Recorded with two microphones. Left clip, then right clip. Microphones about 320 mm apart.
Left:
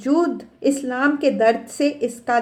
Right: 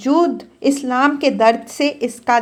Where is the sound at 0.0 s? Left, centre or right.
Centre.